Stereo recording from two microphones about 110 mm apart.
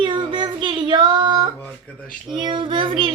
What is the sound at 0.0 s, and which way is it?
Child singing, 45° right (ahead or behind).